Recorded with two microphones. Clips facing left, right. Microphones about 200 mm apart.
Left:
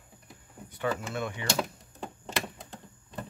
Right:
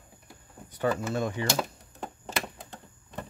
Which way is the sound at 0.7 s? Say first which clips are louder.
Right 4 dB; 40° right (ahead or behind).